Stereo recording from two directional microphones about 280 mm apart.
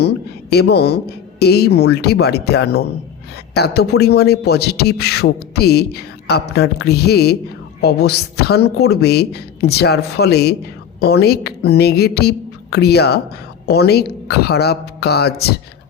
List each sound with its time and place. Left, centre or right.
0.0 s a man's voice: left